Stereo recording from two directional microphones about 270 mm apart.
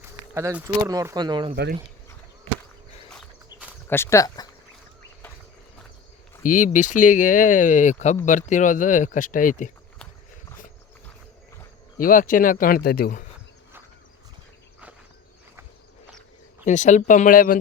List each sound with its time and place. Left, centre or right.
0.0 s speech: centre
1.5 s speech: right
3.5 s a sound: centre
3.8 s speech: centre
6.4 s speech: left
11.9 s speech: left
16.6 s speech: left